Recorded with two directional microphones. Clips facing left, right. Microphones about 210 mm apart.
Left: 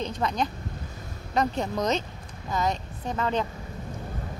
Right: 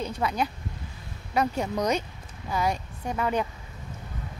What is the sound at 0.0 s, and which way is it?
A woman's voice, 10° right (ahead or behind).